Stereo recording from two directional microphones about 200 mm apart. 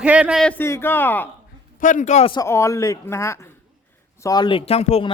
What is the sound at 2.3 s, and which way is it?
Speech, 15° left (ahead or behind).